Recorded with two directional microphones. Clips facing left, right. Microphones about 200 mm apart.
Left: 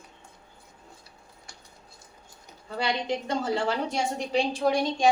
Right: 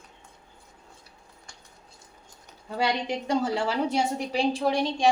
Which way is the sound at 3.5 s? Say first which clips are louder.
Right 2 dB; 5° right (ahead or behind).